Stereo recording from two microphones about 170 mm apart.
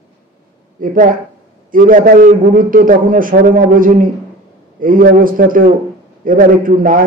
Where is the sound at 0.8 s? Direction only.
50° right (ahead or behind).